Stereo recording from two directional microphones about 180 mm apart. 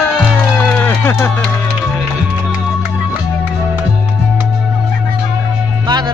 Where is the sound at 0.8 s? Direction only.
10° left (ahead or behind).